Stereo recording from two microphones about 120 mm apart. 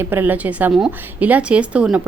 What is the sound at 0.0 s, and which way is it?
Speech, 15° right (ahead or behind).